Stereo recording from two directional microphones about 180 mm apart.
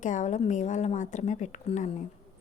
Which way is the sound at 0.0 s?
45° left (ahead or behind).